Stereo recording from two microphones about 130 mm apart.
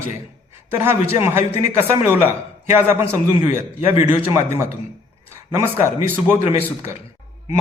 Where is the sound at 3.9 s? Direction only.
15° right (ahead or behind).